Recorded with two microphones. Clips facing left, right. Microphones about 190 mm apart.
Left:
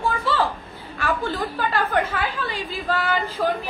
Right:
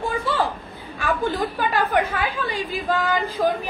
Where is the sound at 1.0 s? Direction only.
15° right (ahead or behind).